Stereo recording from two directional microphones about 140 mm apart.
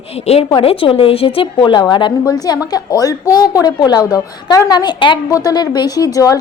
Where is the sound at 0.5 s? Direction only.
40° left (ahead or behind).